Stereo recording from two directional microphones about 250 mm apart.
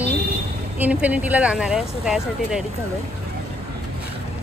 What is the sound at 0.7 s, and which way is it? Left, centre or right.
Speech, centre.